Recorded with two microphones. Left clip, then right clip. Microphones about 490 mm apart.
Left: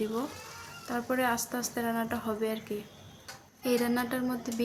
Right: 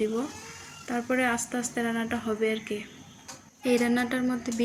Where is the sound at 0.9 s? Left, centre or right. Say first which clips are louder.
Right 3 dB; left.